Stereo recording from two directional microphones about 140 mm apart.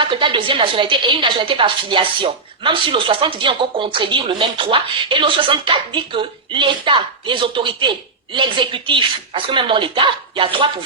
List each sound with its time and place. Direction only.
0.0 s a woman's voice: 35° right (ahead or behind)